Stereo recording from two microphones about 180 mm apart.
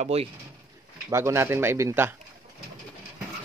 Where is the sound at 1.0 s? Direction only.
15° right (ahead or behind).